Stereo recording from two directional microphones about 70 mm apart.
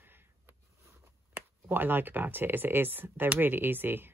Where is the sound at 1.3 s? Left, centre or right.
Right.